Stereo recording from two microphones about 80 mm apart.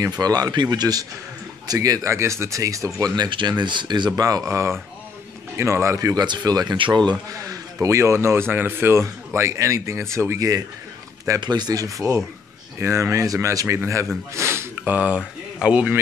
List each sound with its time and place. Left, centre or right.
0.0 s speech: right
3.2 s speech: right
4.3 s speech: right
6.1 s speech: right
7.1 s speech: right
11.2 s speech: right
14.3 s a sound: right
15.0 s speech: centre